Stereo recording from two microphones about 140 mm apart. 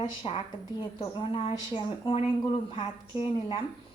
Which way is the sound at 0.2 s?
35° left (ahead or behind).